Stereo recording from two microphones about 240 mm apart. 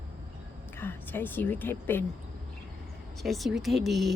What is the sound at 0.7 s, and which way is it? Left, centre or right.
A woman's voice, centre.